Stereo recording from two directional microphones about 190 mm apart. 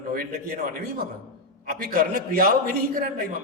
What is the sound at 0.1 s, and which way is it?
Speech, 50° right (ahead or behind).